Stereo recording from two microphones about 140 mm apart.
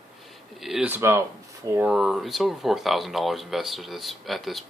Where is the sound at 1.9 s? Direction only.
Centre (ahead or behind).